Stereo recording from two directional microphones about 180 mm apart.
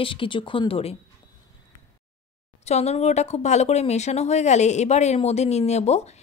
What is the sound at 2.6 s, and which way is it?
A woman's voice, 35° left (ahead or behind).